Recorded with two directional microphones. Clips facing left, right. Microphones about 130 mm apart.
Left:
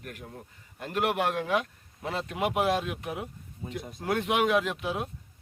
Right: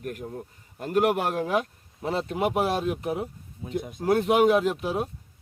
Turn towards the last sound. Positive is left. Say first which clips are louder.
# right 4 dB
turn(degrees=-40)  # may be behind; listen again after turning